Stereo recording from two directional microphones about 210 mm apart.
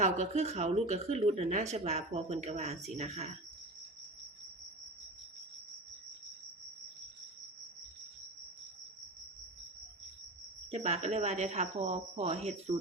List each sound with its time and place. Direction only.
0.0 s a woman's voice: 35° right (ahead or behind)
10.7 s a woman's voice: 30° right (ahead or behind)